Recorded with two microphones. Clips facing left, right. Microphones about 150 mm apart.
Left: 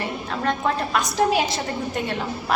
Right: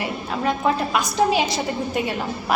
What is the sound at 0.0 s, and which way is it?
A woman's voice, 5° right (ahead or behind).